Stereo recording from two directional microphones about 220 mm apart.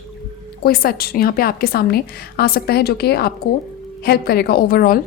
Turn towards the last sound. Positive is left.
turn(degrees=40)  # may be behind; listen again after turning